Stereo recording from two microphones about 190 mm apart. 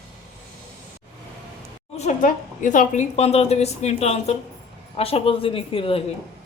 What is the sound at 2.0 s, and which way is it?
A woman's voice, 40° left (ahead or behind).